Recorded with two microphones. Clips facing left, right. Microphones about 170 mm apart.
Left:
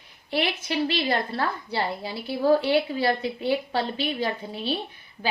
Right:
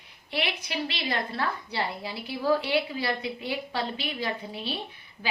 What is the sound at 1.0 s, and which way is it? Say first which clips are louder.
A woman's voice: left 4 dB; 35° left (ahead or behind).